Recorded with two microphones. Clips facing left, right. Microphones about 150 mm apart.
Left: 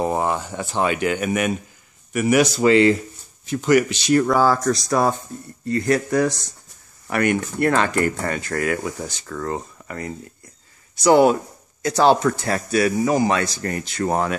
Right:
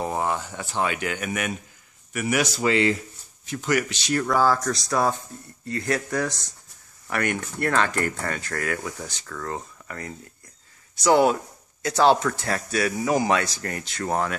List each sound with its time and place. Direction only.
0.0 s speech: 30° left (ahead or behind)
2.6 s speech: 40° left (ahead or behind)
3.4 s speech: 25° left (ahead or behind)
3.9 s speech: 15° left (ahead or behind)
9.8 s speech: 10° left (ahead or behind)
13.1 s speech: 5° right (ahead or behind)
14.0 s speech: 15° left (ahead or behind)